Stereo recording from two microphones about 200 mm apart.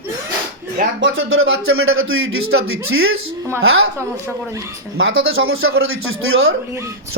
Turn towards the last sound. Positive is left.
turn(degrees=-90)